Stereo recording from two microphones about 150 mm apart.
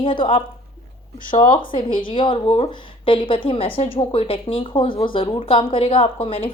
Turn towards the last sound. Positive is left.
turn(degrees=35)  # may be behind; listen again after turning